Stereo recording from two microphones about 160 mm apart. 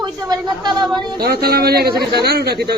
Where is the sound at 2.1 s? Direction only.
85° right.